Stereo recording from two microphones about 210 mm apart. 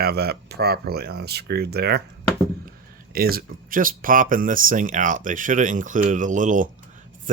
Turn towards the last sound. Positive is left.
turn(degrees=-40)  # may be behind; listen again after turning